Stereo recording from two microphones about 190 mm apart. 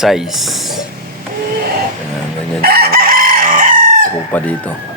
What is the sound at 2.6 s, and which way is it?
Chicken, 55° right (ahead or behind).